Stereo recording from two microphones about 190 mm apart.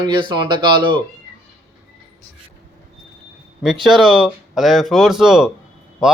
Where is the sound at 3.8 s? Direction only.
Centre (ahead or behind).